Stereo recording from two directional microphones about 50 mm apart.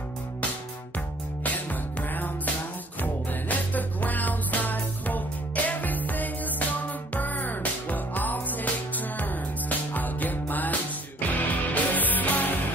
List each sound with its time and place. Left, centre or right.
0.9 s music: left